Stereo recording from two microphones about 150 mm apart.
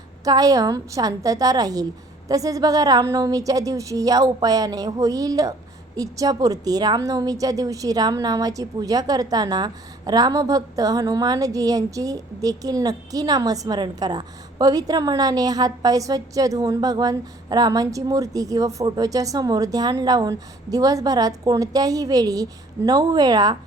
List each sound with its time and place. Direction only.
0.3 s a woman's voice: 25° right (ahead or behind)